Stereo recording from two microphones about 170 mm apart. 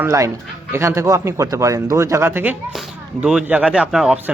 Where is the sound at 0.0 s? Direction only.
20° right (ahead or behind).